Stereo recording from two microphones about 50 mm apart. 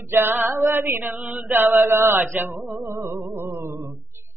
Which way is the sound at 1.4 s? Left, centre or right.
Right.